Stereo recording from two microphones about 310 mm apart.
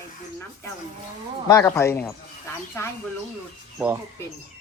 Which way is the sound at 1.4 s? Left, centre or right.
Centre.